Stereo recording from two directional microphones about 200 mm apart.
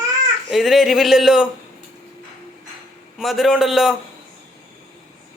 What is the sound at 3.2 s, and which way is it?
Speech, centre (ahead or behind).